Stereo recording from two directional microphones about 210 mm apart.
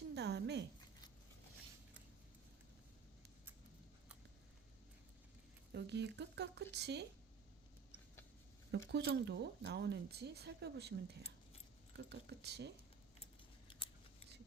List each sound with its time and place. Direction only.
0.1 s a sound: 55° right (ahead or behind)
5.7 s speech: 55° right (ahead or behind)
8.9 s speech: 50° right (ahead or behind)
13.7 s scissors: 25° left (ahead or behind)